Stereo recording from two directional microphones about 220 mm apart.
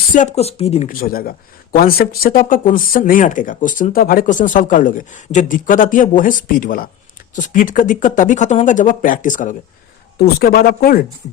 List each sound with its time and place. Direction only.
0.1 s speech: 35° left (ahead or behind)